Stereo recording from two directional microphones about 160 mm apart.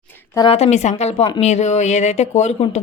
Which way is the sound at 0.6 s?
45° left (ahead or behind).